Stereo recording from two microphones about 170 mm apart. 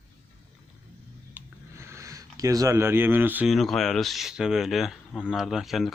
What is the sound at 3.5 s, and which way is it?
Speech, centre (ahead or behind).